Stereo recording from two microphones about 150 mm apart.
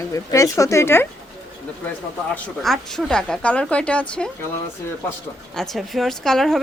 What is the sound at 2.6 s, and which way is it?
Speech, centre (ahead or behind).